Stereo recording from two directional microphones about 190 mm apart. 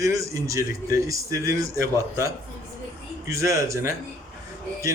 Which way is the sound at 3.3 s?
15° right (ahead or behind).